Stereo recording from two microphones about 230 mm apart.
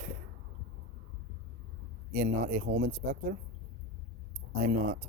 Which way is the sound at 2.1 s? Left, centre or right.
Right.